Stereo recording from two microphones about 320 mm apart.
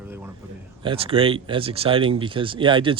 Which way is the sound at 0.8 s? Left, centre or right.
Centre.